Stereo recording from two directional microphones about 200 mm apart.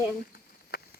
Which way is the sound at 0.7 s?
50° left (ahead or behind).